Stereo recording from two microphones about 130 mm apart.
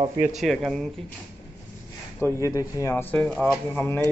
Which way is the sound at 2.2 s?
25° left (ahead or behind).